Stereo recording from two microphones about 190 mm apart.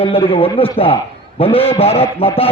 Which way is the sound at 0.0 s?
30° left (ahead or behind).